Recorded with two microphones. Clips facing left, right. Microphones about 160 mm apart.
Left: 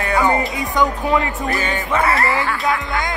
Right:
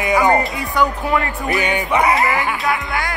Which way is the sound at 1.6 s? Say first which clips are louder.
Right 4 dB; 15° right (ahead or behind).